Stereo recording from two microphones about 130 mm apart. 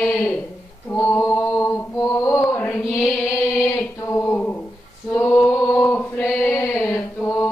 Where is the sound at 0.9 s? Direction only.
20° left (ahead or behind).